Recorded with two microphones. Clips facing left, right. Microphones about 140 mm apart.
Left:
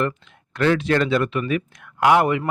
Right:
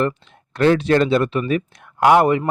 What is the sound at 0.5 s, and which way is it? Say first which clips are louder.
Speech: right 4 dB; 35° right (ahead or behind).